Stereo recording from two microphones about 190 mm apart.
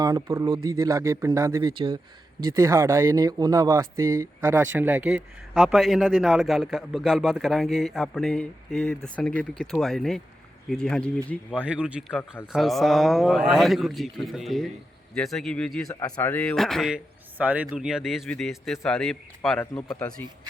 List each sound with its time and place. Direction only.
0.0 s speech: 15° right (ahead or behind); by 11.6 s 5° left (ahead or behind)
11.6 s speech: 5° right (ahead or behind)
15.9 s speech: 15° left (ahead or behind)